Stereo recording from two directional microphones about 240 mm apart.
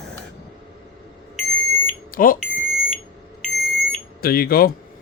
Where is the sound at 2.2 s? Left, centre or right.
Left.